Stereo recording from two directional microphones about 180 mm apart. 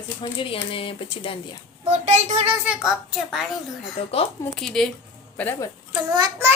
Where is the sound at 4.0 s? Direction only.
30° left (ahead or behind).